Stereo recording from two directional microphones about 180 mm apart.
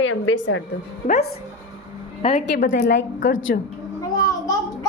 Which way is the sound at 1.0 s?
50° left (ahead or behind).